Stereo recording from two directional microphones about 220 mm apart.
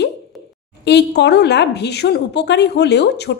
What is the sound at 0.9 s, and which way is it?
Speech, 50° left (ahead or behind).